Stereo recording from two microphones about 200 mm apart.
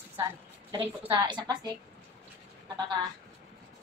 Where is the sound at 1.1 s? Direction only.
20° right (ahead or behind).